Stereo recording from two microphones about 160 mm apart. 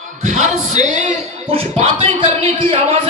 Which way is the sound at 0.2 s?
45° right (ahead or behind).